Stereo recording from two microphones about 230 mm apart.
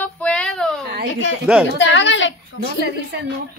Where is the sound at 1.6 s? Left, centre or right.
Left.